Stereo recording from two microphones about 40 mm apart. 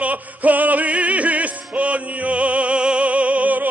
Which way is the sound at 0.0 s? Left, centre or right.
Right.